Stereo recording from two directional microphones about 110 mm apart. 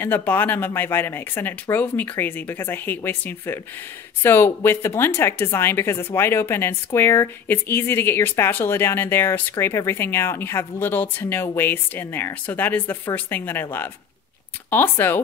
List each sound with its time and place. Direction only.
0.0 s a woman's voice: 20° left (ahead or behind)